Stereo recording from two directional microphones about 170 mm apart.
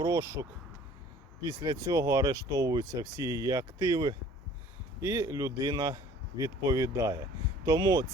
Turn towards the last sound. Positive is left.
turn(degrees=-20)  # may be behind; listen again after turning